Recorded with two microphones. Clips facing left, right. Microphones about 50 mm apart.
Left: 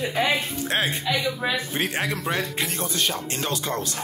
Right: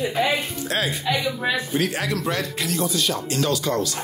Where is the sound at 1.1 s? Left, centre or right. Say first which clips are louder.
Right 4 dB; centre.